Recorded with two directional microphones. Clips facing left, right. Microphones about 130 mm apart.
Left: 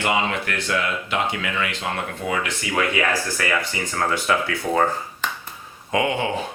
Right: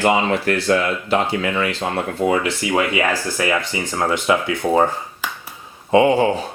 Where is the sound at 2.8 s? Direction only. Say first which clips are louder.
Right 1 dB; 20° right (ahead or behind).